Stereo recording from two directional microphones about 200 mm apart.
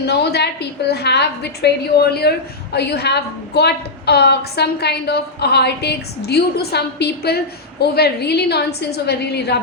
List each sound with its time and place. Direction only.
0.0 s a woman's voice: 55° left (ahead or behind)